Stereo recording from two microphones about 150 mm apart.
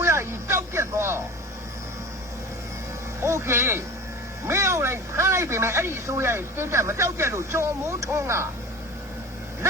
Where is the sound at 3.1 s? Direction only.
15° right (ahead or behind).